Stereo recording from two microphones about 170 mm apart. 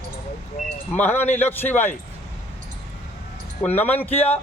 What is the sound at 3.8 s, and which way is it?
Speech, 10° left (ahead or behind).